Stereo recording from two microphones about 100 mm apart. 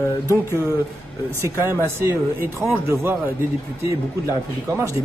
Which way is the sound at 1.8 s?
25° right (ahead or behind).